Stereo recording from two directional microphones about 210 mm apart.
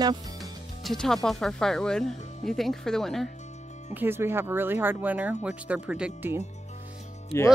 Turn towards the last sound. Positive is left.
turn(degrees=15)  # may be behind; listen again after turning